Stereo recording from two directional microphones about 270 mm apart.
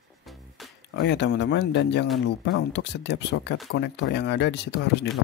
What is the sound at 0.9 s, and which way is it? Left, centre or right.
Speech, left.